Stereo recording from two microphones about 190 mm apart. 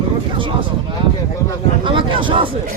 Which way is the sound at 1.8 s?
25° right (ahead or behind).